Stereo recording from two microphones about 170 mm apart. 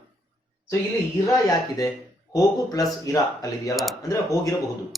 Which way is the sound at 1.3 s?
20° left (ahead or behind).